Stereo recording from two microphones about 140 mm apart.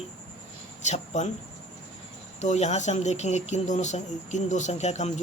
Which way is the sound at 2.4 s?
55° left (ahead or behind).